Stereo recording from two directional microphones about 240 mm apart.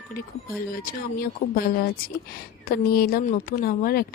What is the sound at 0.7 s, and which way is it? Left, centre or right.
A woman's voice, left.